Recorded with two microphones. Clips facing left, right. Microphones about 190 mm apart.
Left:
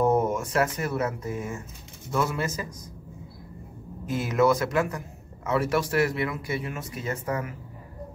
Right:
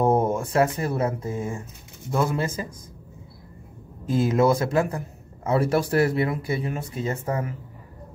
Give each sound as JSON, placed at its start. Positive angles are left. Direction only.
{"t": 0.0, "sound": "speech", "side_deg": -30}
{"t": 4.1, "sound": "a man's voice", "side_deg": -30}